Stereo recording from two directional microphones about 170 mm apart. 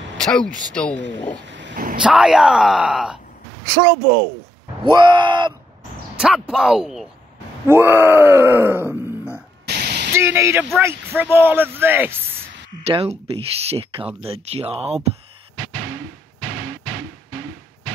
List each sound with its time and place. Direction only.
0.2 s speech: 5° left (ahead or behind)
1.4 s a sound: 90° right
2.0 s speech: 5° right (ahead or behind)
4.8 s speech: 25° right (ahead or behind)
6.1 s speech: 5° right (ahead or behind)
7.6 s groan: 15° right (ahead or behind)
9.7 s static: 75° right (ahead or behind)
10.1 s speech: 15° right (ahead or behind)
12.8 s speech: 35° right (ahead or behind)